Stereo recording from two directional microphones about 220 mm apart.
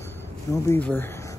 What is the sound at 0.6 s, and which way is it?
Speech, 10° left (ahead or behind).